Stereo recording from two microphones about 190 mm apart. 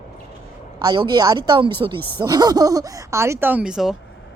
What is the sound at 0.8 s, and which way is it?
A woman's voice, 20° right (ahead or behind).